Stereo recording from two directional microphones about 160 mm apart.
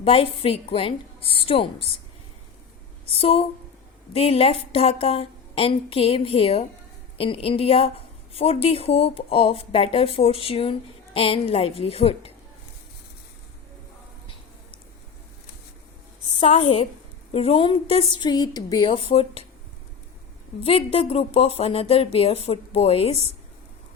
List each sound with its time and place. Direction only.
0.0 s a woman's voice: 35° left (ahead or behind)
3.2 s a woman's voice: 40° left (ahead or behind)
16.4 s a woman's voice: 35° left (ahead or behind)
20.7 s a woman's voice: 35° left (ahead or behind)